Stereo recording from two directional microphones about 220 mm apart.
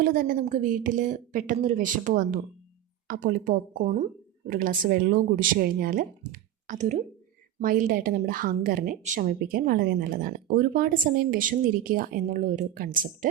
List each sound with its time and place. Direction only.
0.0 s speech: 40° right (ahead or behind)